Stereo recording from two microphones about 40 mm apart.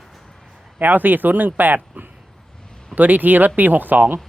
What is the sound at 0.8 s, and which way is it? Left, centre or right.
Speech, right.